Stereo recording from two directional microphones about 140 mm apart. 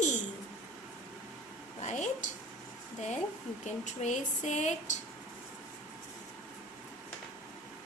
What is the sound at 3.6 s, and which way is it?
A woman's voice, 55° left (ahead or behind).